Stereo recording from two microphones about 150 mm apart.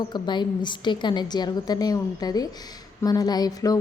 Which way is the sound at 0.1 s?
30° left (ahead or behind).